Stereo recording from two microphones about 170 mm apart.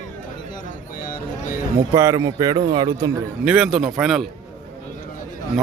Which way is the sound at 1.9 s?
20° right (ahead or behind).